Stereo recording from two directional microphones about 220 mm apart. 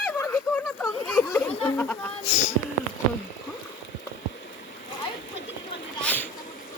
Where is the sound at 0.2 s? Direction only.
10° left (ahead or behind).